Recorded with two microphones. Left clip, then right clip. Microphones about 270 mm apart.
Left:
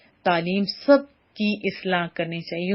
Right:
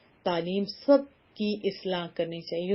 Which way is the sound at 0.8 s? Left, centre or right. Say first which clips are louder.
Left 5 dB; left.